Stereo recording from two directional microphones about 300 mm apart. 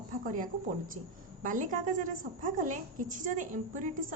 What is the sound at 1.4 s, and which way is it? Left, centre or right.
A woman's voice, right.